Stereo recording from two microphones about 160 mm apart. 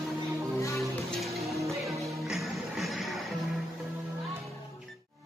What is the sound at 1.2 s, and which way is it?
Music, centre (ahead or behind).